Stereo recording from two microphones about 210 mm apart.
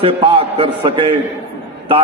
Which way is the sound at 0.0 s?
25° right (ahead or behind).